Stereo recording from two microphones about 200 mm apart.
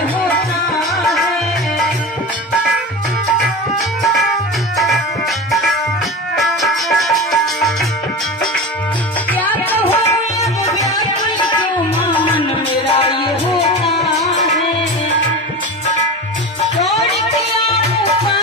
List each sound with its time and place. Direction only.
4.7 s music: centre (ahead or behind)
6.3 s music: centre (ahead or behind)
9.3 s music: 10° left (ahead or behind)
12.4 s music: 30° left (ahead or behind)
17.6 s music: 30° left (ahead or behind)